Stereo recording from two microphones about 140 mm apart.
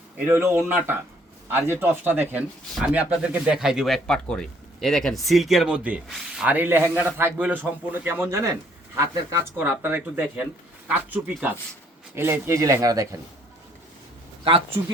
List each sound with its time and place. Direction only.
0.2 s speech: 20° right (ahead or behind)